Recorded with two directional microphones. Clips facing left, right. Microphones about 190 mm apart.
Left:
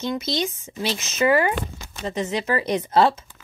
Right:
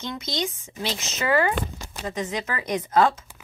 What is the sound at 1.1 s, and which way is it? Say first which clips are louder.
Speech: left 3 dB; 20° left (ahead or behind).